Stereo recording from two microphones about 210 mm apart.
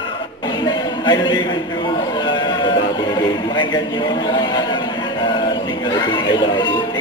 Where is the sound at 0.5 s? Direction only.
20° left (ahead or behind).